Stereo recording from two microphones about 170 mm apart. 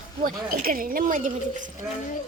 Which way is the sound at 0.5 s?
55° right (ahead or behind).